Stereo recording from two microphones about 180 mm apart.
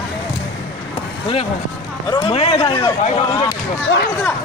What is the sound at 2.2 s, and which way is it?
Speech, 30° left (ahead or behind).